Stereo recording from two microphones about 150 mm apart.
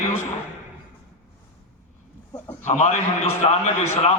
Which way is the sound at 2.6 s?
50° left (ahead or behind).